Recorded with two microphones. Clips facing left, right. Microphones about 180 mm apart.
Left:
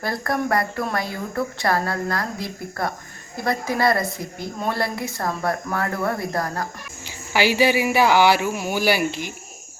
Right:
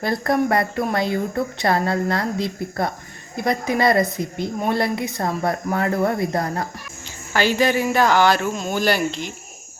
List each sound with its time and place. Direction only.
0.0 s a woman's voice: 25° right (ahead or behind)
7.3 s speech: 10° left (ahead or behind)